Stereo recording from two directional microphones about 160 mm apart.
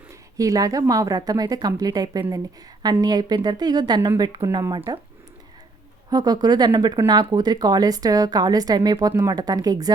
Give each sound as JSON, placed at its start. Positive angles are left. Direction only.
{"t": 0.1, "sound": "speech", "side_deg": -20}
{"t": 6.1, "sound": "speech", "side_deg": -25}